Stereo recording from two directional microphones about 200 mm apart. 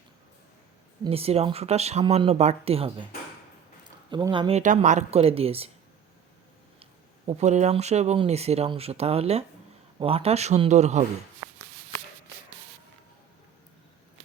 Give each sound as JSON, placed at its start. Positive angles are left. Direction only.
{"t": 1.0, "sound": "speech", "side_deg": -30}
{"t": 4.1, "sound": "speech", "side_deg": -25}
{"t": 7.3, "sound": "speech", "side_deg": -35}